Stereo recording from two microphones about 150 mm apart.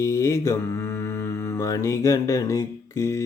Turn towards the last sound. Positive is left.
turn(degrees=20)  # may be behind; listen again after turning